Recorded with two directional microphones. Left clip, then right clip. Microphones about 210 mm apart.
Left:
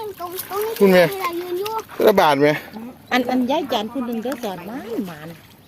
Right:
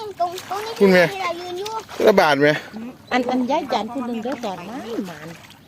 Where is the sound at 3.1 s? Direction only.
45° left (ahead or behind).